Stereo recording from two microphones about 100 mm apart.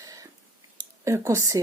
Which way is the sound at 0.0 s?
35° right (ahead or behind).